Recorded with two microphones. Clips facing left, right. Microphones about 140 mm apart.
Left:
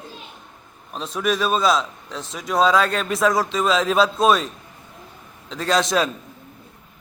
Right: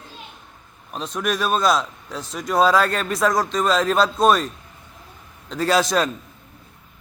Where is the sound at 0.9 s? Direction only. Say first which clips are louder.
Left 2 dB; centre (ahead or behind).